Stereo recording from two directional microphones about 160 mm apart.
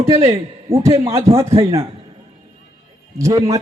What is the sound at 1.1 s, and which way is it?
Speech, 35° right (ahead or behind).